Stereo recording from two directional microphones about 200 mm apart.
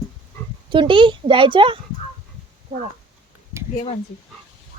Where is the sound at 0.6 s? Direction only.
25° right (ahead or behind).